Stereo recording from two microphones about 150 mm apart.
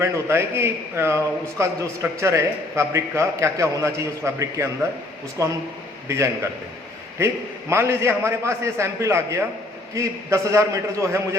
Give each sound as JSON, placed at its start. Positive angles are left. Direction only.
{"t": 0.0, "sound": "a man's voice", "side_deg": -15}
{"t": 7.7, "sound": "a man's voice", "side_deg": -15}